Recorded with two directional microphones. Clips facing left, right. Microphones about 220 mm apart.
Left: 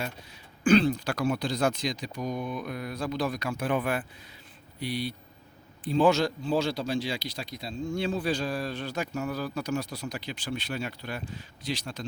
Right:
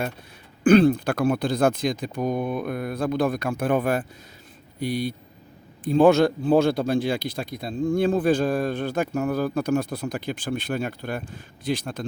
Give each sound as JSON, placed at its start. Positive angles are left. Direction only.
{"t": 0.6, "sound": "speech", "side_deg": -55}